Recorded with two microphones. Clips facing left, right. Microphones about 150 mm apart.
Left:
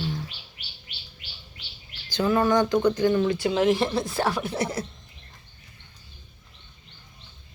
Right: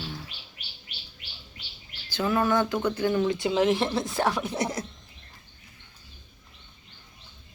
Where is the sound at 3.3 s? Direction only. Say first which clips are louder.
Left 2 dB; 20° right (ahead or behind).